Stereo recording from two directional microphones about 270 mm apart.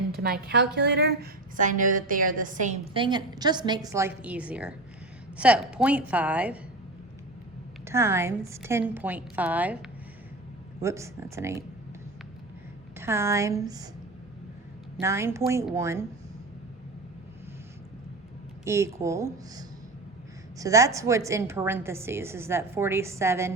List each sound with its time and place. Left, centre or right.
0.2 s a woman's voice: right; by 6.6 s centre
7.9 s a woman's voice: centre
13.0 s a woman's voice: centre
14.9 s a woman's voice: centre
18.6 s a woman's voice: centre